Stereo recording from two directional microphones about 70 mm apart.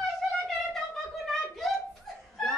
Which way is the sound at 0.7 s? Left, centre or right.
Centre.